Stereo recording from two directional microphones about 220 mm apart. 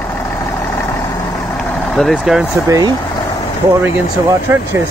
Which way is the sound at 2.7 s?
15° right (ahead or behind).